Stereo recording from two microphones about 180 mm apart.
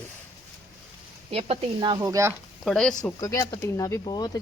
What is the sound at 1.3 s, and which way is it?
Speech, 35° right (ahead or behind).